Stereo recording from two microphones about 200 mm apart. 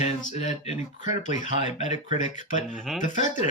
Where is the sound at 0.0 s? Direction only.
35° left (ahead or behind).